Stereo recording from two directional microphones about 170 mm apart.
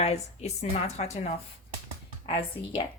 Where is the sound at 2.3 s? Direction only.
30° left (ahead or behind).